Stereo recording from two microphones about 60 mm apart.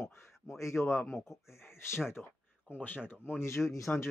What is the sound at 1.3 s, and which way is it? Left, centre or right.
Speech, centre.